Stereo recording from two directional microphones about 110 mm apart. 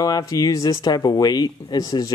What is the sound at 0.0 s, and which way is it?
Speech, 35° left (ahead or behind).